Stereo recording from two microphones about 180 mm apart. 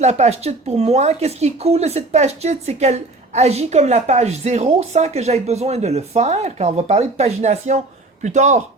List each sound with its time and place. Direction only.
0.0 s speech: 40° right (ahead or behind)